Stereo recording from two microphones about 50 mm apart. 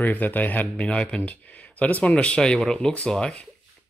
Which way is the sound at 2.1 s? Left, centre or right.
Centre.